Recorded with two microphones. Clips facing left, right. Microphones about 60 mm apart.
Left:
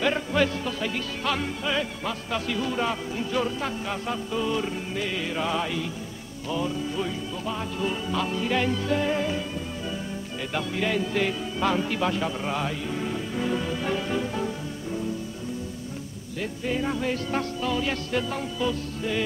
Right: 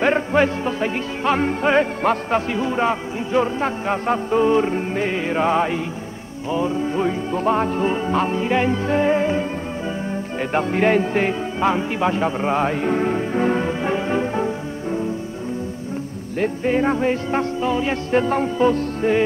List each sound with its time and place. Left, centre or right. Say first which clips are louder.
0.0 s music: right 7 dB; right
10.5 s speech: right 10 dB; right
16.3 s music: right 9 dB; right
18.2 s music: right 10 dB; right